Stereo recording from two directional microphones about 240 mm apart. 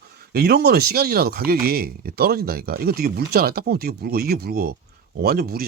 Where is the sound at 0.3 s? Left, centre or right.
Right.